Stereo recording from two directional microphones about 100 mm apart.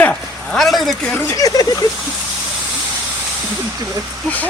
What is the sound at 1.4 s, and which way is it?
Speech, 40° left (ahead or behind).